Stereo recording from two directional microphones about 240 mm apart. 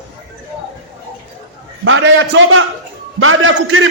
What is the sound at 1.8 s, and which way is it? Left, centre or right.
A man's voice, right.